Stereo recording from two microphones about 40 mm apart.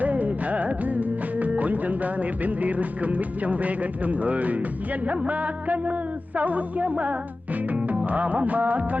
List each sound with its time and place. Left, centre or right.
0.0 s music: right